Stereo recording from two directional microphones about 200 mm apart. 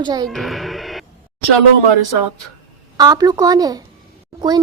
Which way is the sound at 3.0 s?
20° right (ahead or behind).